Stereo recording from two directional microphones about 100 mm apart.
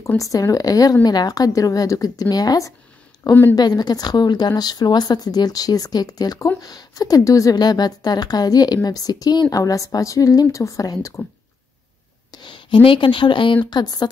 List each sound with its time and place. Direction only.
0.2 s speech: 35° left (ahead or behind)
12.3 s speech: 50° left (ahead or behind)
13.7 s speech: 45° left (ahead or behind)